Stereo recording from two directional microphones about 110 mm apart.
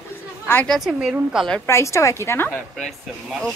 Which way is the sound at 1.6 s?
25° left (ahead or behind).